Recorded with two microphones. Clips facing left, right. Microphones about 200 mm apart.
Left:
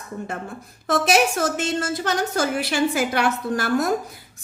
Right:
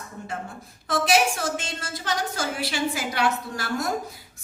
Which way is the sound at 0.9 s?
45° left (ahead or behind).